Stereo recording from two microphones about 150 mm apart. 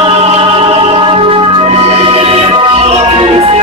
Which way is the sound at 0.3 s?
40° right (ahead or behind).